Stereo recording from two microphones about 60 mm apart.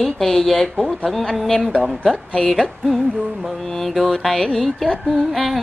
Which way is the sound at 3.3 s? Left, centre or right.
Centre.